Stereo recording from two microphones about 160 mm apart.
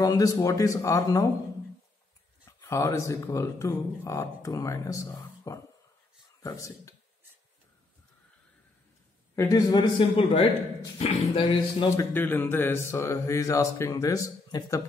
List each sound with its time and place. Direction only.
0.0 s speech: 20° left (ahead or behind)
2.4 s speech: 20° left (ahead or behind)
9.3 s speech: 20° left (ahead or behind)
12.0 s speech: 10° left (ahead or behind)